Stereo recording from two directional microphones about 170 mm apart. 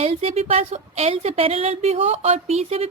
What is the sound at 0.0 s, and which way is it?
A woman's voice, 40° right (ahead or behind).